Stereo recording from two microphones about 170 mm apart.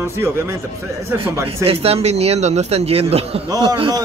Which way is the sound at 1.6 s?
35° right (ahead or behind).